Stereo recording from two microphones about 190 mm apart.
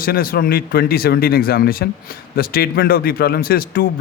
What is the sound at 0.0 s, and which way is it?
Speech, 50° left (ahead or behind).